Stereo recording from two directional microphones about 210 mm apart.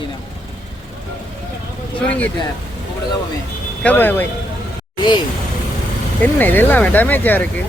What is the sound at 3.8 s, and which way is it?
Speech, 10° left (ahead or behind).